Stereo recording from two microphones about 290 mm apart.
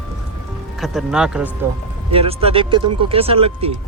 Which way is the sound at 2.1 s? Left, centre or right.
Centre.